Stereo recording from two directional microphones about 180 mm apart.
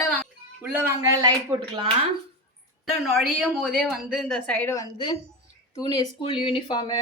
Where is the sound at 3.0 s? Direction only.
Centre (ahead or behind); by 6.9 s 25° left (ahead or behind).